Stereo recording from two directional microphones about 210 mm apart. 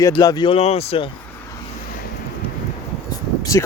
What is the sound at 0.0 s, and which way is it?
Speech, 20° left (ahead or behind).